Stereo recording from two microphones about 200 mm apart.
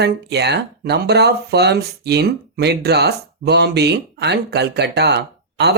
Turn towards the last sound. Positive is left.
turn(degrees=-55)  # may be behind; listen again after turning